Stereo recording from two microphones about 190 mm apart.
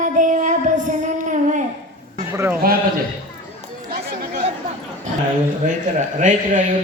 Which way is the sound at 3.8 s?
55° right (ahead or behind).